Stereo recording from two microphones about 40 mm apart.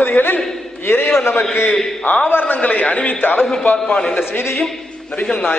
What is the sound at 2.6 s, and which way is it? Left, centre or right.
Speech, left.